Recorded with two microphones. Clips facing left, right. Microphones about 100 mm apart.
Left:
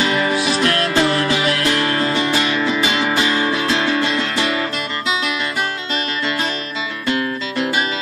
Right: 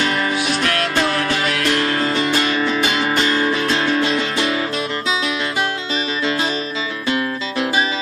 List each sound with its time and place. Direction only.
0.0 s music: 5° left (ahead or behind)